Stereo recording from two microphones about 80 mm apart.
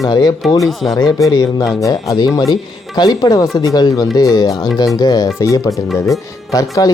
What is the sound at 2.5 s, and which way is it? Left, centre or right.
Speech, left.